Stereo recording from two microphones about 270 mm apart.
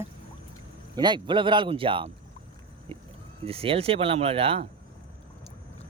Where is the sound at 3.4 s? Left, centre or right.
Right.